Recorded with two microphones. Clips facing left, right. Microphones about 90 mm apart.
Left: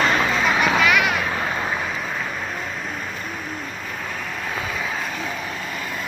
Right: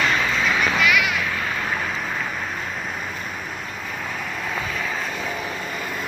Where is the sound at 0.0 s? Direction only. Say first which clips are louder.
Left 2 dB; 35° left (ahead or behind).